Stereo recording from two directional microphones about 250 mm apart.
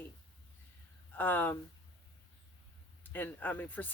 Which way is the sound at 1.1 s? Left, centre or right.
Centre.